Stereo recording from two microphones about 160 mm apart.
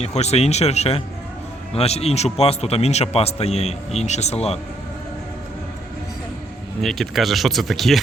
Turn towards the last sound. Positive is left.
turn(degrees=0)  # may be behind; listen again after turning